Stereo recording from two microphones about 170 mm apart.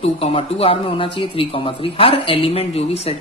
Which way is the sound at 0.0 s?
35° left (ahead or behind).